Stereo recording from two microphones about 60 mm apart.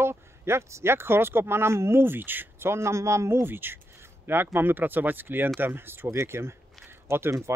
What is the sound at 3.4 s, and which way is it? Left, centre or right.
Speech, right.